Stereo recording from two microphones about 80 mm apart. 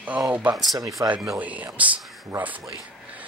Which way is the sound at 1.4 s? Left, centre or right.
Centre.